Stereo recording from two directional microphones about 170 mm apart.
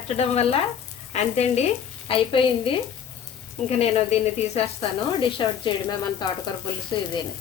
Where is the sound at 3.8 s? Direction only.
40° left (ahead or behind).